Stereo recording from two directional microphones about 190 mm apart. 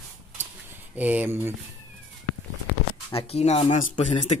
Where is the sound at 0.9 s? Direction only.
10° right (ahead or behind).